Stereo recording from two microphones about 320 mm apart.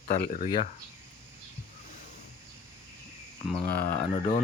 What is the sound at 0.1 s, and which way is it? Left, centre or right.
Speech, left.